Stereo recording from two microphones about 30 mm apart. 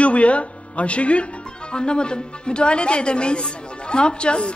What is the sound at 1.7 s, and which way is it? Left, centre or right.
Speech, left.